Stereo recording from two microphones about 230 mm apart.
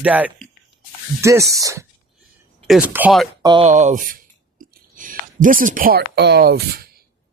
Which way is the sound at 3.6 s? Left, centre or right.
Right.